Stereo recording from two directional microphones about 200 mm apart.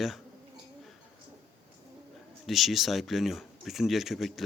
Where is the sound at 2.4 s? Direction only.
Centre (ahead or behind).